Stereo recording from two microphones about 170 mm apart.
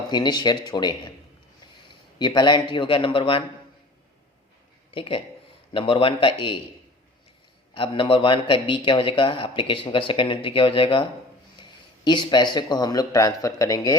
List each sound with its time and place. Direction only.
0.1 s a man's voice: 25° left (ahead or behind)
4.9 s speech: 30° left (ahead or behind)
7.7 s speech: 30° left (ahead or behind)